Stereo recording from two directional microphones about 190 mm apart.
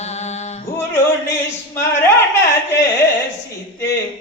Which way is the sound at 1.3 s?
15° left (ahead or behind).